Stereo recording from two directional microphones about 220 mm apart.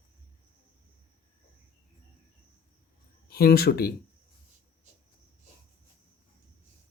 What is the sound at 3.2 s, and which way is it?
Speech, 45° left (ahead or behind).